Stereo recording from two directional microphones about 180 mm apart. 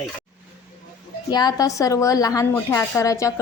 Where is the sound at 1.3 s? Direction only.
20° left (ahead or behind).